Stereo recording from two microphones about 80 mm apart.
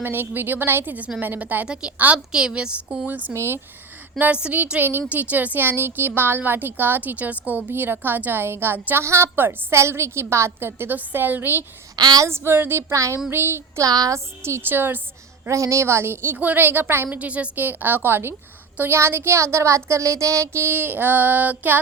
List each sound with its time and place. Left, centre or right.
0.0 s a woman's voice: right; by 3.1 s centre
3.3 s speech: right
4.2 s a woman's voice: centre
11.9 s a sound: right
12.3 s speech: right
12.9 s speech: right
13.3 s a woman's voice: right
13.8 s a sound: right
14.4 s a woman's voice: right
15.4 s a woman's voice: right